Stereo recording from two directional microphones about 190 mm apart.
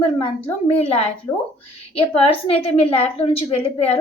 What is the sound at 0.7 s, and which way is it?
A woman's voice, 30° left (ahead or behind).